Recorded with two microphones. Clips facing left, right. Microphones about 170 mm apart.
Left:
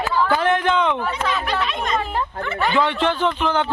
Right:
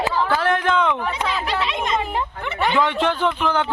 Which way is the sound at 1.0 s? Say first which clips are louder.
Left 1 dB; 15° right (ahead or behind).